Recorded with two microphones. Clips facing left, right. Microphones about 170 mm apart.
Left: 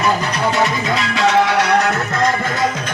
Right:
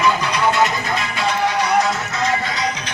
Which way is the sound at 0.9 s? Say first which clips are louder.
Left 5 dB; 80° left.